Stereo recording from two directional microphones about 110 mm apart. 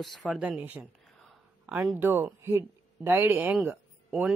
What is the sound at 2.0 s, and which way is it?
Speech, 15° right (ahead or behind).